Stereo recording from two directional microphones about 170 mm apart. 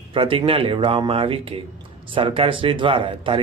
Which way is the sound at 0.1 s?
30° right (ahead or behind).